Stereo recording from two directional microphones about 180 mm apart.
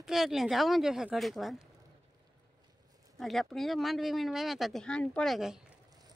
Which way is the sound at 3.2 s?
Centre (ahead or behind).